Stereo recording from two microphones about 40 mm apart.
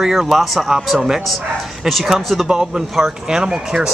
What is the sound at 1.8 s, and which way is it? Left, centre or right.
Speech, centre.